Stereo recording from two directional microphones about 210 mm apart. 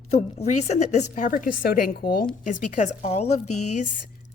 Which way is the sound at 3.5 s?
90° left.